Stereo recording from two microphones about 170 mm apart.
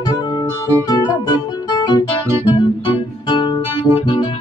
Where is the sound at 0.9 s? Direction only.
25° left (ahead or behind).